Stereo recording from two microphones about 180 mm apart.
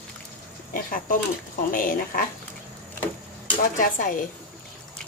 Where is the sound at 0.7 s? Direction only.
50° left (ahead or behind).